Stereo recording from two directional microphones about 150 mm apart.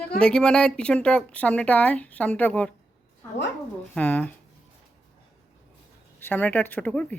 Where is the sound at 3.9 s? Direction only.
10° left (ahead or behind).